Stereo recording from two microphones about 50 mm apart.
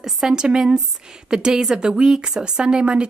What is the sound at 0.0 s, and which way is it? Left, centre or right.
A woman's voice, centre.